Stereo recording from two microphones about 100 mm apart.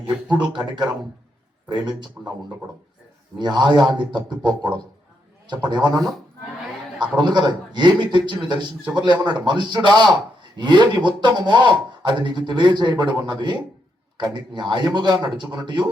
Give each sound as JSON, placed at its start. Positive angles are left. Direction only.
{"t": 0.3, "sound": "a man's voice", "side_deg": -50}
{"t": 1.7, "sound": "a man's voice", "side_deg": -50}
{"t": 3.3, "sound": "a man's voice", "side_deg": -50}
{"t": 7.0, "sound": "a man's voice", "side_deg": -50}